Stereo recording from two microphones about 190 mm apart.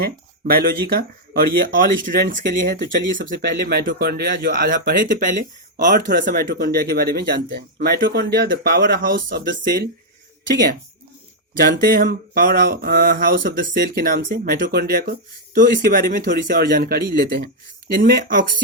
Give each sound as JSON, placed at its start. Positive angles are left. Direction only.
{"t": 0.4, "sound": "speech", "side_deg": -50}
{"t": 3.0, "sound": "speech", "side_deg": -70}
{"t": 11.6, "sound": "speech", "side_deg": -50}